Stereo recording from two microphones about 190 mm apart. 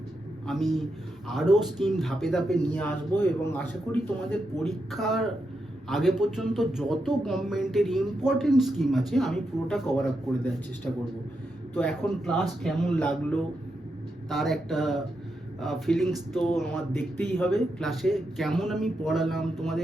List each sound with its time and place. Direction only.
0.4 s speech: centre (ahead or behind)
4.6 s speech: centre (ahead or behind)